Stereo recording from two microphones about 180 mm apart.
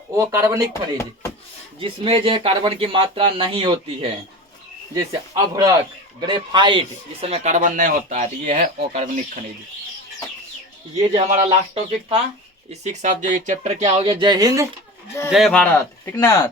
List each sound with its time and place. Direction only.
0.2 s speech: 15° right (ahead or behind)
0.7 s speech: 15° left (ahead or behind)
1.8 s speech: 30° right (ahead or behind)
5.3 s speech: 20° right (ahead or behind); by 9.4 s 45° right (ahead or behind)
11.1 s speech: 40° right (ahead or behind)
11.4 s speech: 30° right (ahead or behind)
12.8 s speech: 40° right (ahead or behind); by 14.7 s 20° right (ahead or behind)
15.3 s speech: centre (ahead or behind)
15.6 s speech: 10° left (ahead or behind)